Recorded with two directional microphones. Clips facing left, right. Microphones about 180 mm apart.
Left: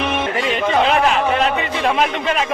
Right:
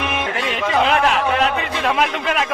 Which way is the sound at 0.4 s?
Centre (ahead or behind).